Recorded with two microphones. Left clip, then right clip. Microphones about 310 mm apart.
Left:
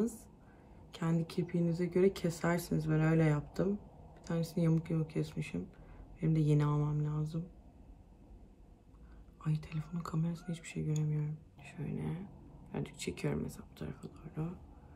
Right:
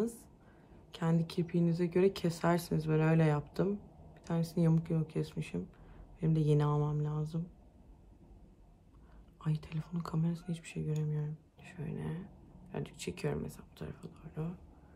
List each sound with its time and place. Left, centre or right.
0.9 s speech: centre
9.4 s speech: centre